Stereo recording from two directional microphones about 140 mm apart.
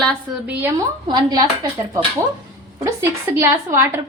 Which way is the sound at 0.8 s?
30° right (ahead or behind).